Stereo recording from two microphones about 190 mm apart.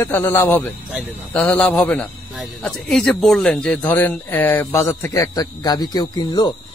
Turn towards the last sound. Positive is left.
turn(degrees=20)  # may be behind; listen again after turning